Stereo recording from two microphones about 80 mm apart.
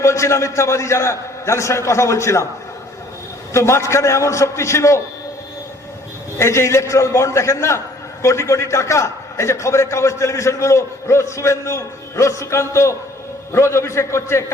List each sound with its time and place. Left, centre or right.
0.0 s a man's voice: left
3.5 s a man's voice: left
6.4 s a man's voice: left